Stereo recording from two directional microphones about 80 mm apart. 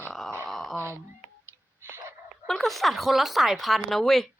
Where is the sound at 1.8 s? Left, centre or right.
Right.